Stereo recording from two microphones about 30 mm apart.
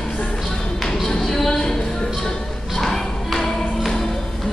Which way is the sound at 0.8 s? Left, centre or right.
Left.